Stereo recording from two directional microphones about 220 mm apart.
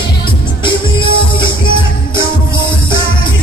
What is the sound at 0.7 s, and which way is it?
Music, 20° left (ahead or behind).